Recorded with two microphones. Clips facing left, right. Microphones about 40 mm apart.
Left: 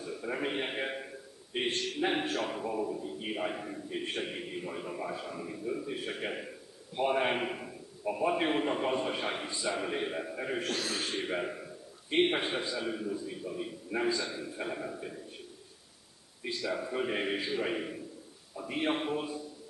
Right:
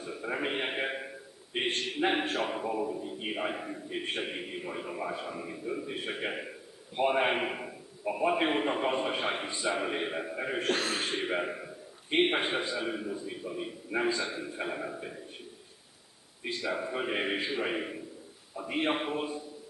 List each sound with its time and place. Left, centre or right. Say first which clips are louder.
0.0 s a man's voice: right 1 dB; centre
10.7 s a man's voice: right 4 dB; right
16.4 s a man's voice: right 1 dB; right